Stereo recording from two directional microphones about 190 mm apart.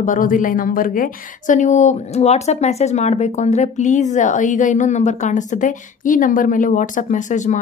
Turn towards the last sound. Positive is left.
turn(degrees=40)  # may be behind; listen again after turning